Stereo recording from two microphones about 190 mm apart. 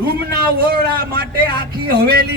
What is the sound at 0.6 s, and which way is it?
Speech, 55° right (ahead or behind).